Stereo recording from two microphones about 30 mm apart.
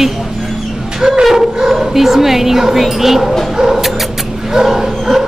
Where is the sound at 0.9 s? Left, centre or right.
Centre.